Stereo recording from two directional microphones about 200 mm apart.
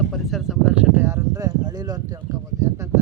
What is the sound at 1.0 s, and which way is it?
Speech, 15° right (ahead or behind).